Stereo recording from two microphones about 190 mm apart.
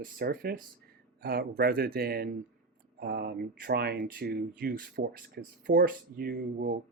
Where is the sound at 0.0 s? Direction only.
50° right (ahead or behind).